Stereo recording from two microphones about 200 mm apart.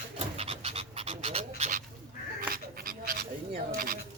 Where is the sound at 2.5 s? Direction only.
45° right (ahead or behind).